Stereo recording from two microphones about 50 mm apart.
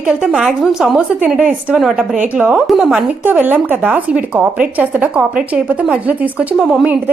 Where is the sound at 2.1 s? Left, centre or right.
Right.